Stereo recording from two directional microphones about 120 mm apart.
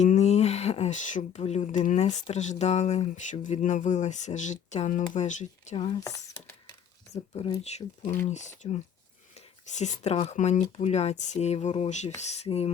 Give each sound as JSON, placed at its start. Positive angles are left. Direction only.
{"t": 0.0, "sound": "speech", "side_deg": 70}
{"t": 5.7, "sound": "speech", "side_deg": 50}
{"t": 6.0, "sound": "speech", "side_deg": 30}
{"t": 7.6, "sound": "speech", "side_deg": 65}
{"t": 8.3, "sound": "speech", "side_deg": 80}
{"t": 9.3, "sound": "a sound", "side_deg": 75}
{"t": 10.2, "sound": "speech", "side_deg": 80}